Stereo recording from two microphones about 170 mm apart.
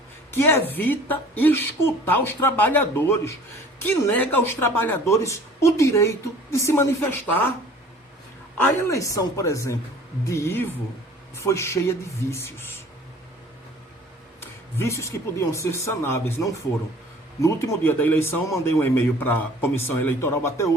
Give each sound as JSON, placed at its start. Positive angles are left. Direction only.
{"t": 0.3, "sound": "a woman's voice", "side_deg": 15}
{"t": 8.6, "sound": "a woman's voice", "side_deg": 20}
{"t": 14.4, "sound": "a woman's voice", "side_deg": 15}